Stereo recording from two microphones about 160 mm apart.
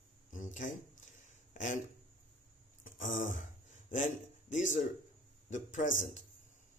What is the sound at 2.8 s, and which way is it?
Speech, 50° left (ahead or behind).